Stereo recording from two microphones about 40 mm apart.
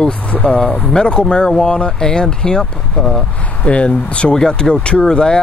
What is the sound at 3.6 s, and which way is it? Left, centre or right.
Speech, left.